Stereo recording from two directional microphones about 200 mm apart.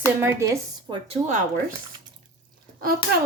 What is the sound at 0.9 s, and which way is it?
Speech, 30° right (ahead or behind).